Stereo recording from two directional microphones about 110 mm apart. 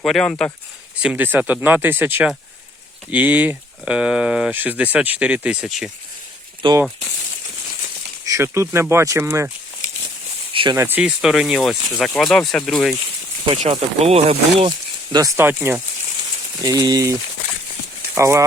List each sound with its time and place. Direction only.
0.0 s speech: 5° left (ahead or behind)
1.0 s speech: 15° right (ahead or behind)
6.6 s speech: 50° right (ahead or behind)
8.2 s speech: 30° right (ahead or behind)
10.5 s speech: 50° right (ahead or behind)
10.8 s speech: 20° right (ahead or behind)
11.0 s speech: 5° right (ahead or behind)
13.6 s speech: 75° right (ahead or behind)
14.7 s a sound: 40° right (ahead or behind)
15.4 s speech: 20° right (ahead or behind)
16.6 s speech: 35° right (ahead or behind)